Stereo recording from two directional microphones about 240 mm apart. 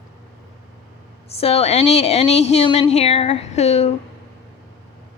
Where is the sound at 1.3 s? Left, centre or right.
Left.